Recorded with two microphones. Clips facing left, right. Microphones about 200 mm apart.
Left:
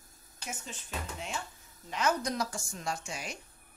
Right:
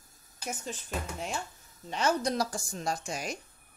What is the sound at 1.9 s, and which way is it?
A woman's voice, 30° right (ahead or behind).